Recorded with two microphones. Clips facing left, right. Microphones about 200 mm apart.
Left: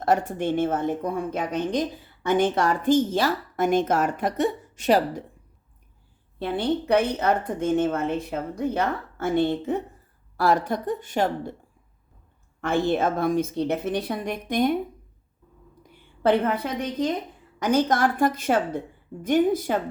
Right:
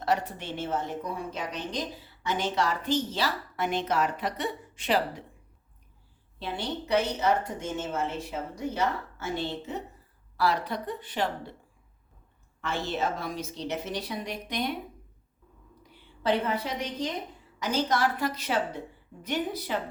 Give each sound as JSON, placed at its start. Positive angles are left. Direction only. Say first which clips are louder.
{"t": 0.0, "sound": "a woman's voice", "louder": "left 6 dB", "side_deg": 50}
{"t": 6.4, "sound": "a woman's voice", "louder": "left 9 dB", "side_deg": 55}
{"t": 12.6, "sound": "a woman's voice", "louder": "left 8 dB", "side_deg": 50}
{"t": 15.9, "sound": "a woman's voice", "louder": "left 6 dB", "side_deg": 50}